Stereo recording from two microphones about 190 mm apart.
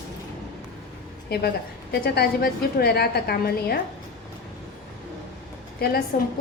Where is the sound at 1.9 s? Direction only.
60° left (ahead or behind).